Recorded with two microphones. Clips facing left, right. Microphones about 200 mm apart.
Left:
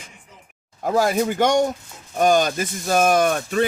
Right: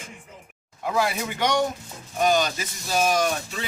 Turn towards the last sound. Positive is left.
turn(degrees=55)  # may be behind; listen again after turning